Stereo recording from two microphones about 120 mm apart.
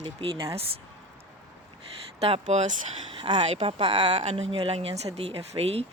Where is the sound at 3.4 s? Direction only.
55° right (ahead or behind).